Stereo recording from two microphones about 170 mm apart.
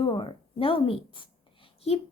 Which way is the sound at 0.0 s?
30° left (ahead or behind).